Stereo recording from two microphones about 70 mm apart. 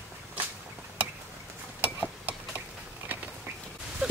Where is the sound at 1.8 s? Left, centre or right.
Right.